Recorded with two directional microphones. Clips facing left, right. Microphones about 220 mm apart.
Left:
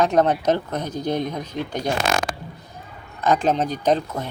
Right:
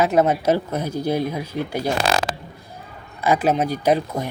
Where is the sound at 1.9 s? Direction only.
35° right (ahead or behind).